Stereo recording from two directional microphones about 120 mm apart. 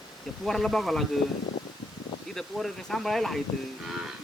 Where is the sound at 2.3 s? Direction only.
5° left (ahead or behind).